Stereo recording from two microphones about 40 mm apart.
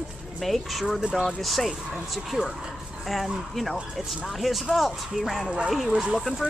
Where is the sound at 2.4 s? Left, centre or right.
Right.